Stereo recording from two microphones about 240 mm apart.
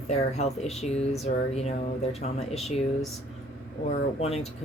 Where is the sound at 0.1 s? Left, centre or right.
Left.